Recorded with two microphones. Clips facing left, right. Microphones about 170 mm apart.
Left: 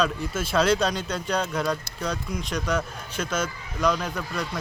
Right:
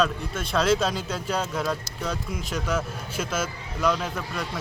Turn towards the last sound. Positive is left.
turn(degrees=-5)  # may be behind; listen again after turning